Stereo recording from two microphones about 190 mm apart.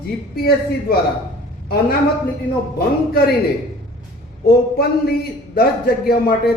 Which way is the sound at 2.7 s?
55° left (ahead or behind).